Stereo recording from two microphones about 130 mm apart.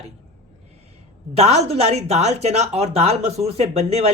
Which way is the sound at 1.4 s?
55° right (ahead or behind).